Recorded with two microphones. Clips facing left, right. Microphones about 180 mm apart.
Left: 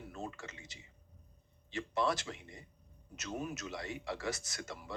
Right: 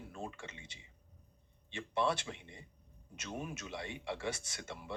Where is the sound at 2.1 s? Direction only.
25° right (ahead or behind).